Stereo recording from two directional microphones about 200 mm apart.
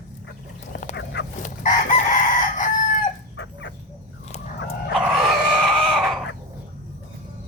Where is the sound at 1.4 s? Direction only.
40° left (ahead or behind).